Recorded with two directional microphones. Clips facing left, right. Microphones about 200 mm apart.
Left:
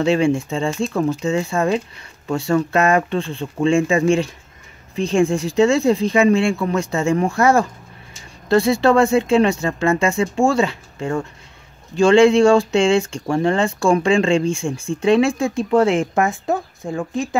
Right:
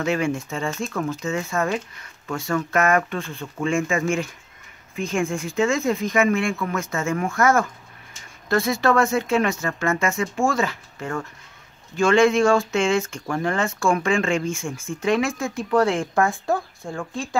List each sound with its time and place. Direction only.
0.0 s speech: 30° left (ahead or behind)